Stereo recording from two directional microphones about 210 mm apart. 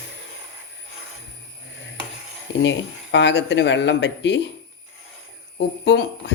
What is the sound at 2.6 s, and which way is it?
Speech, 60° left (ahead or behind).